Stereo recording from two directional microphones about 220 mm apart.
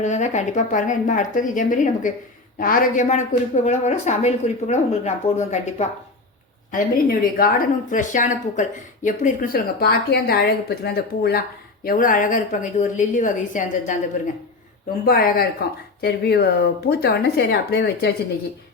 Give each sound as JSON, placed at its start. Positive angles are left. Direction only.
{"t": 0.0, "sound": "speech", "side_deg": 30}
{"t": 15.0, "sound": "speech", "side_deg": 40}